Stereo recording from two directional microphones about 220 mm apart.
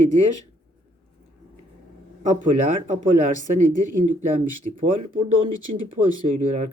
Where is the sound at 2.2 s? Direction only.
35° right (ahead or behind).